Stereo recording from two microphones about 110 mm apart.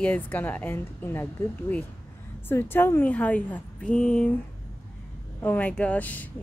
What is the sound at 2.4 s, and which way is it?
Speech, 20° left (ahead or behind).